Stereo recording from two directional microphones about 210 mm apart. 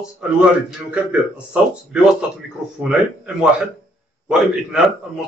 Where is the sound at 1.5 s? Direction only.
5° right (ahead or behind).